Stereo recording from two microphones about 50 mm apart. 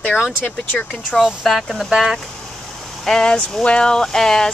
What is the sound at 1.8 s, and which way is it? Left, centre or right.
Speech, centre.